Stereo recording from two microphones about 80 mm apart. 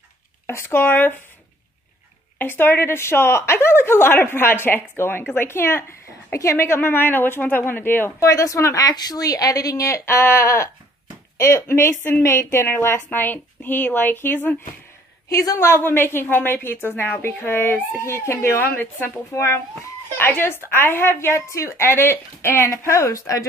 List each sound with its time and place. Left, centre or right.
0.5 s a woman's voice: left
2.3 s a woman's voice: left
8.3 s a woman's voice: left
15.2 s a woman's voice: left
15.8 s a woman's voice: left